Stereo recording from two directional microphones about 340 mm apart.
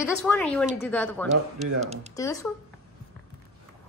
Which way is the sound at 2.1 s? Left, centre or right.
Centre.